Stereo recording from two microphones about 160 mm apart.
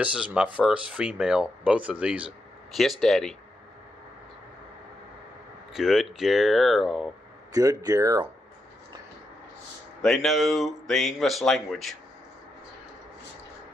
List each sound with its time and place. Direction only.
0.0 s speech: 5° right (ahead or behind)
5.7 s speech: centre (ahead or behind)
7.5 s speech: 20° right (ahead or behind)
10.0 s speech: centre (ahead or behind)